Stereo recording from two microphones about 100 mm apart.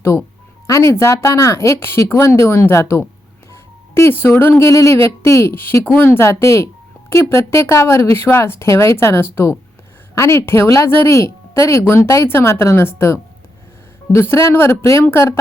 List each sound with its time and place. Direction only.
0.0 s speech: 25° left (ahead or behind)